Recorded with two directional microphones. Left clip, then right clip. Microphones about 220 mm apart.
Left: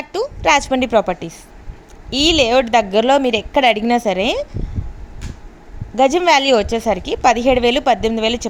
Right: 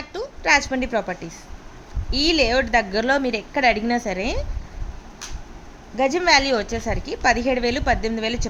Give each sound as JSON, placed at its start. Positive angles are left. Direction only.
{"t": 0.1, "sound": "a woman's voice", "side_deg": 30}
{"t": 6.0, "sound": "a woman's voice", "side_deg": 30}